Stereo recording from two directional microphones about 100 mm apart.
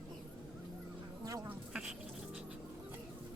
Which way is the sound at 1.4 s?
10° right (ahead or behind).